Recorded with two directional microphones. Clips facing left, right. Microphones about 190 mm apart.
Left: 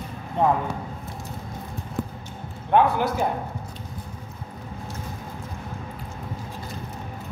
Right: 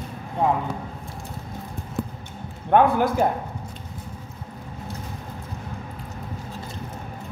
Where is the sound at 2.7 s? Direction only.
50° right (ahead or behind).